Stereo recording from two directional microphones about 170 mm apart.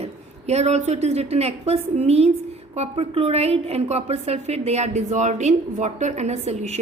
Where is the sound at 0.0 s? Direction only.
40° right (ahead or behind).